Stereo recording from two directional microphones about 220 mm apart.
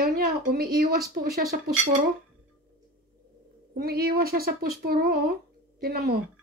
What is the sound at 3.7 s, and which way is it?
Speech, 45° right (ahead or behind).